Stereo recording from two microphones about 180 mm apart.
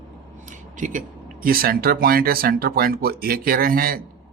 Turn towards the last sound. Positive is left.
turn(degrees=-55)  # may be behind; listen again after turning